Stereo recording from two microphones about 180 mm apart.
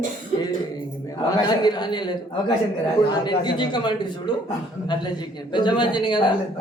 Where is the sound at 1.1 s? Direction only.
25° left (ahead or behind).